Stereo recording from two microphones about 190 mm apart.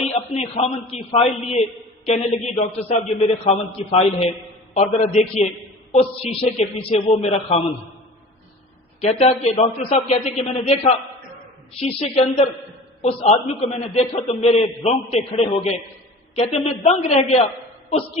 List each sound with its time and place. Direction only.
0.0 s a man's voice: 35° left (ahead or behind)
9.0 s a man's voice: 35° left (ahead or behind)